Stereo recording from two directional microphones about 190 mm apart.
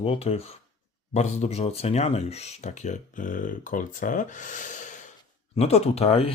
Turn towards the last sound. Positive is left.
turn(degrees=30)  # may be behind; listen again after turning